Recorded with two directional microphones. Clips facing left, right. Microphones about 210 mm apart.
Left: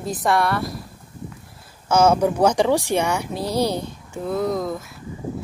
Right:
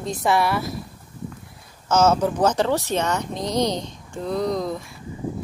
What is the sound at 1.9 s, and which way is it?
Speech, 10° left (ahead or behind).